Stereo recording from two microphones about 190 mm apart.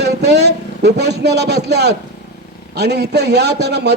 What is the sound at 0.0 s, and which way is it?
A man's voice, 65° right (ahead or behind).